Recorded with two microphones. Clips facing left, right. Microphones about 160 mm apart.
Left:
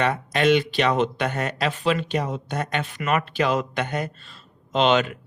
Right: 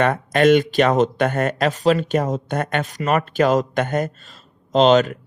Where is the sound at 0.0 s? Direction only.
50° right (ahead or behind).